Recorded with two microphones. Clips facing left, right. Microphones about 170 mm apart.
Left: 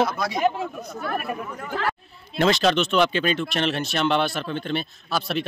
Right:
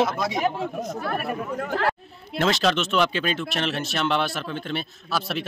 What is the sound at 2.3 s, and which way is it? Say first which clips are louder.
Speech: left 2 dB; centre (ahead or behind).